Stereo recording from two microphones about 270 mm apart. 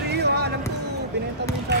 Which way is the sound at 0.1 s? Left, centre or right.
Right.